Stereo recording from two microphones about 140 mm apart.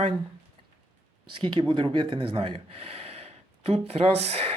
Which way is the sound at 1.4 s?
35° right (ahead or behind).